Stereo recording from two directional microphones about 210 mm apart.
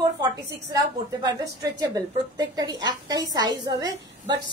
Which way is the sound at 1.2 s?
15° right (ahead or behind).